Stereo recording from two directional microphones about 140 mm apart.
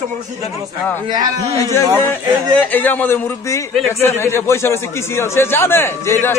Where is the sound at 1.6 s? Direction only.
20° left (ahead or behind).